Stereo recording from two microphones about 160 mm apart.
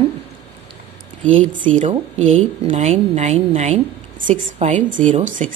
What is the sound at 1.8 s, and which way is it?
A woman's voice, 40° right (ahead or behind).